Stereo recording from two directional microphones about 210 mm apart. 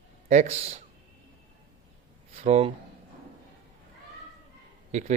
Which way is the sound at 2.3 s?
30° right (ahead or behind).